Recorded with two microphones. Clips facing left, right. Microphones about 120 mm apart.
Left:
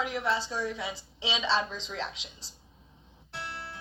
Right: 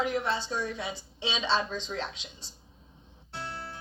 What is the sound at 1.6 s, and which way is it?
Speech, 40° right (ahead or behind).